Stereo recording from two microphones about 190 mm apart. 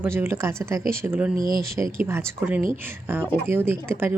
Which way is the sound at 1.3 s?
50° right (ahead or behind).